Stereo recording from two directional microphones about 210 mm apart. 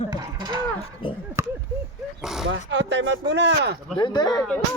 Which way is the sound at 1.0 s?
25° left (ahead or behind).